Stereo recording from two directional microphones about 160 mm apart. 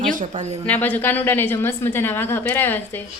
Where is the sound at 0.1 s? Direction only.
50° right (ahead or behind).